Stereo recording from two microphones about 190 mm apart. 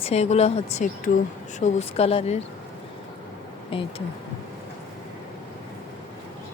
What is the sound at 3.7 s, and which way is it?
Speech, 30° left (ahead or behind).